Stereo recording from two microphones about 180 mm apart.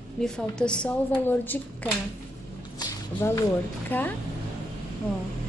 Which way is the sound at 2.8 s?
20° left (ahead or behind).